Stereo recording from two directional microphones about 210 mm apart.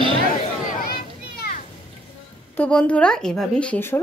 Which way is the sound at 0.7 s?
50° left (ahead or behind).